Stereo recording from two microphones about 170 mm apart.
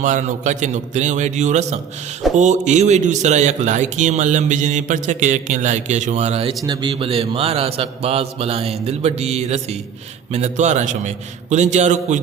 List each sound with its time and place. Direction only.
0.0 s a man's voice: 45° right (ahead or behind)
6.7 s mantra: 30° right (ahead or behind)
10.3 s a man's voice: 45° right (ahead or behind)